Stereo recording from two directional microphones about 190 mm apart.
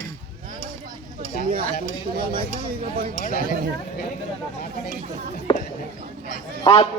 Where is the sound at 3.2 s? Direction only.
50° left (ahead or behind).